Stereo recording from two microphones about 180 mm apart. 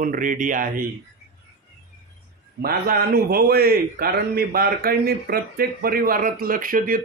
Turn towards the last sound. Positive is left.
turn(degrees=-50)  # may be behind; listen again after turning